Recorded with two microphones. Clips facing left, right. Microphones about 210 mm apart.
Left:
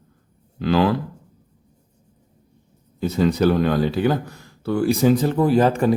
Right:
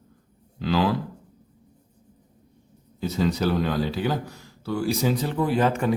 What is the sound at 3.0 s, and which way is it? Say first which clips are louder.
Speech: left 6 dB; 55° left (ahead or behind).